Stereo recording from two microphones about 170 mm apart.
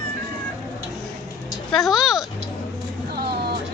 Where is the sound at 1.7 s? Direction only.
Centre (ahead or behind).